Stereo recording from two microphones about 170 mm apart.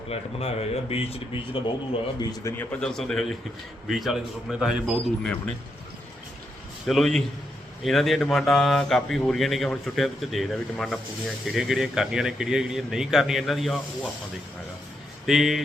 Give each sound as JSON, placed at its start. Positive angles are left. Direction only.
{"t": 0.1, "sound": "a man's voice", "side_deg": 35}
{"t": 2.8, "sound": "speech", "side_deg": 5}
{"t": 6.8, "sound": "speech", "side_deg": 0}
{"t": 15.3, "sound": "speech", "side_deg": 0}